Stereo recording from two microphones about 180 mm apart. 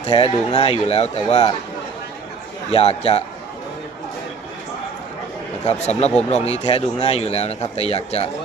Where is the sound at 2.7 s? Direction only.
35° left (ahead or behind).